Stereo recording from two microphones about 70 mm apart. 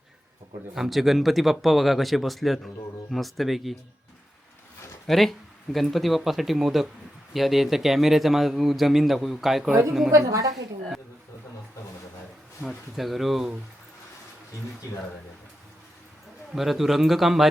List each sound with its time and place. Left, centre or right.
0.7 s a man's voice: centre
5.0 s a man's voice: centre
10.1 s a woman's voice: right
10.5 s a woman's voice: centre
12.6 s a man's voice: centre
16.6 s a man's voice: centre